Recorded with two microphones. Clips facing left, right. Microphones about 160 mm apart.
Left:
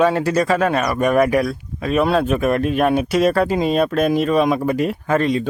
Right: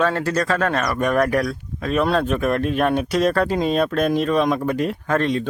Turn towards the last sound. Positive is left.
turn(degrees=5)  # may be behind; listen again after turning